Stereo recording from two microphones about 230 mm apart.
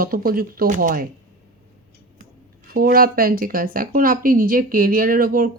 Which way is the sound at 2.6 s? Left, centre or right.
Right.